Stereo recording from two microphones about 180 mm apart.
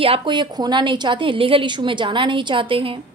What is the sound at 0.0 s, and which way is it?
A woman's voice, 30° right (ahead or behind).